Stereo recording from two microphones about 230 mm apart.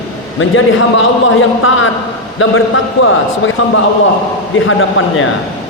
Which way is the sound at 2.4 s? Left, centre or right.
Left.